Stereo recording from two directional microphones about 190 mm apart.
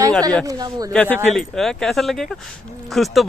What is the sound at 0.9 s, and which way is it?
Speech, 5° left (ahead or behind).